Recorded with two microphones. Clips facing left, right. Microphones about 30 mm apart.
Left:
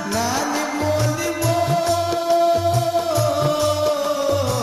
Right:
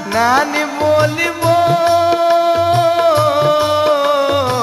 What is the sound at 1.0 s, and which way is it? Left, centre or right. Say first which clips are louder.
Music: right 7 dB; right.